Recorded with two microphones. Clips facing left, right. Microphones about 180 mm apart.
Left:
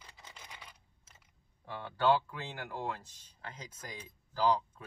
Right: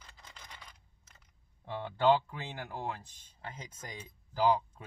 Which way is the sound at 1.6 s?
20° right (ahead or behind).